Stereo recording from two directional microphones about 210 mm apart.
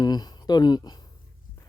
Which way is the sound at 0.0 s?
20° left (ahead or behind).